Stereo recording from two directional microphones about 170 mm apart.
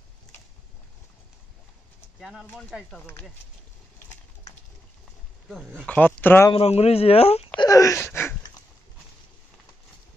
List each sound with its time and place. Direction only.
2.1 s pigeon: centre (ahead or behind)
3.1 s speech: 10° left (ahead or behind)
5.5 s speech: centre (ahead or behind)
5.9 s speech: 10° left (ahead or behind)
6.5 s speech: 35° left (ahead or behind)
7.6 s wail: 20° left (ahead or behind)
8.1 s a sound: 15° left (ahead or behind)